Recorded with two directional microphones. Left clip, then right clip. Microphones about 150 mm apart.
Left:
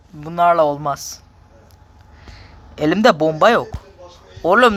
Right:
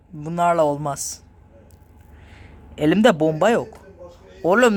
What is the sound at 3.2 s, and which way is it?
Speech, 10° right (ahead or behind).